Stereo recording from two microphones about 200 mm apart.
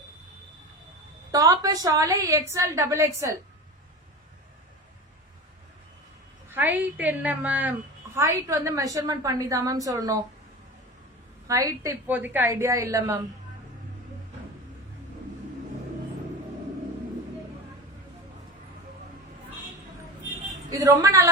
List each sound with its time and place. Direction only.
1.3 s a woman's voice: 15° right (ahead or behind)
6.5 s a woman's voice: 10° right (ahead or behind)
11.4 s a woman's voice: 15° right (ahead or behind)
20.7 s a woman's voice: 20° right (ahead or behind)